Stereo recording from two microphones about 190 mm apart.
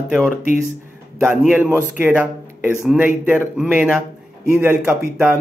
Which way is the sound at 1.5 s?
10° right (ahead or behind).